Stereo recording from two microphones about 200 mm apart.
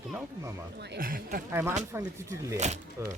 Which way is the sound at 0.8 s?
50° right (ahead or behind).